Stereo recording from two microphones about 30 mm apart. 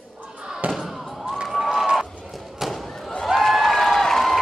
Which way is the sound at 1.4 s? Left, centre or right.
Centre.